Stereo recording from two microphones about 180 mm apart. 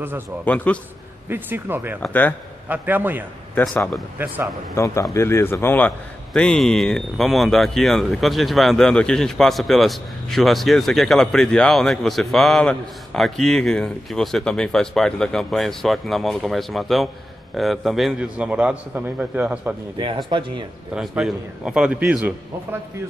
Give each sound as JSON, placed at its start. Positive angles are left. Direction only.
{"t": 0.7, "sound": "a man's voice", "side_deg": 5}
{"t": 1.3, "sound": "speech", "side_deg": -10}
{"t": 2.0, "sound": "a man's voice", "side_deg": 10}
{"t": 2.7, "sound": "speech", "side_deg": -10}
{"t": 3.5, "sound": "speech", "side_deg": 5}
{"t": 4.7, "sound": "a man's voice", "side_deg": 15}
{"t": 20.2, "sound": "speech", "side_deg": -25}
{"t": 20.9, "sound": "speech", "side_deg": -5}